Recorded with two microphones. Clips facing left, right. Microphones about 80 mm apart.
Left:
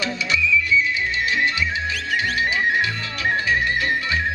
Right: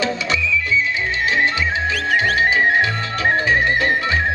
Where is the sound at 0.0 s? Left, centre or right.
Right.